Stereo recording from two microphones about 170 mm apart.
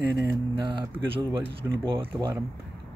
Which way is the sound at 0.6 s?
30° right (ahead or behind).